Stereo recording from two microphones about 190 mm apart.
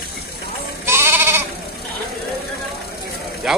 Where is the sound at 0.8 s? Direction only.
10° right (ahead or behind).